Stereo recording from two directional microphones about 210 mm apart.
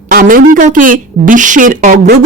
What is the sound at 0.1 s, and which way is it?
A woman's voice, 45° right (ahead or behind).